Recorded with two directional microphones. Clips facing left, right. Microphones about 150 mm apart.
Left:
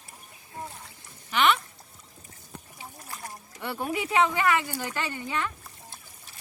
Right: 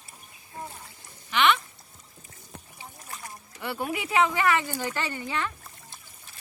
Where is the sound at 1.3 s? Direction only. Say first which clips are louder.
Even; 40° left (ahead or behind).